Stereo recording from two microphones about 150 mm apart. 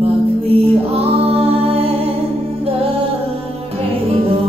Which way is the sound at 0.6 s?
40° right (ahead or behind).